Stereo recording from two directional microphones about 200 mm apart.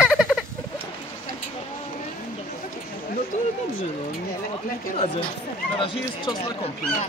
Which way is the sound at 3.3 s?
35° left (ahead or behind).